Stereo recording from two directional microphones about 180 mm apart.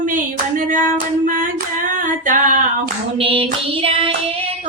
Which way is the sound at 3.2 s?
30° right (ahead or behind).